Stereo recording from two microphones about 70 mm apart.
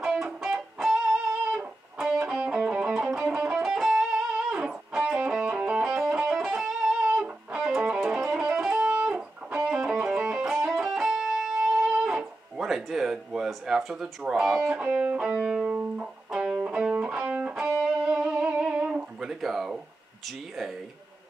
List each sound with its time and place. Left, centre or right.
0.0 s music: centre
20.2 s speech: centre